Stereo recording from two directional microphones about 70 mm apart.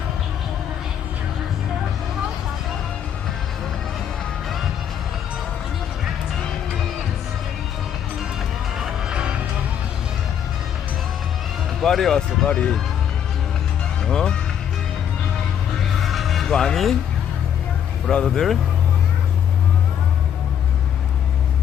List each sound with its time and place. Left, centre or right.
8.8 s music: centre
11.8 s speech: centre
12.5 s speech: centre
14.1 s speech: centre
16.0 s music: centre
18.1 s speech: centre